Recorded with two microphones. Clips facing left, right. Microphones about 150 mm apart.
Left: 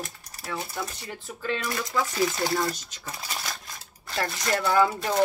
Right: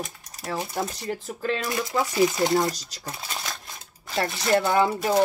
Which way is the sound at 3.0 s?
Centre (ahead or behind).